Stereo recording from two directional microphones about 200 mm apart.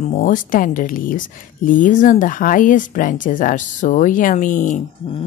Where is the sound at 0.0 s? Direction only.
40° left (ahead or behind).